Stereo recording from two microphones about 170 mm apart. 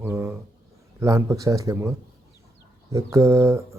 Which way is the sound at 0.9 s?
15° right (ahead or behind).